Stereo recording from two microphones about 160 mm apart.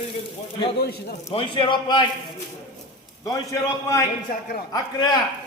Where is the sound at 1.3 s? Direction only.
30° left (ahead or behind).